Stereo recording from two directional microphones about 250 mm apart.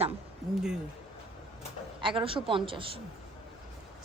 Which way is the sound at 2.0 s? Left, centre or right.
Centre.